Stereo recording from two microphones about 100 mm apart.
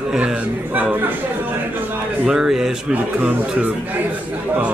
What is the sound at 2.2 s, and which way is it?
Speech, 5° right (ahead or behind).